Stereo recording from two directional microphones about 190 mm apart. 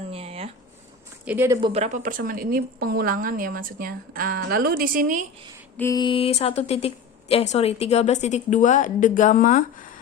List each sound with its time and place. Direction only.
0.1 s a sound: 30° right (ahead or behind)
1.2 s speech: 10° right (ahead or behind)
1.6 s a woman's voice: 35° right (ahead or behind)
5.7 s mantra: 10° left (ahead or behind)
6.0 s a woman's voice: 25° left (ahead or behind); by 9.6 s 45° left (ahead or behind)